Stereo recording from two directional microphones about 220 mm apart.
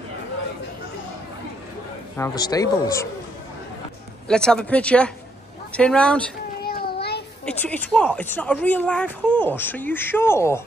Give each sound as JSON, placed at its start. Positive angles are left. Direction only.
{"t": 2.1, "sound": "speech", "side_deg": 15}
{"t": 4.3, "sound": "speech", "side_deg": 5}
{"t": 6.6, "sound": "child singing", "side_deg": 45}
{"t": 7.4, "sound": "speech", "side_deg": 5}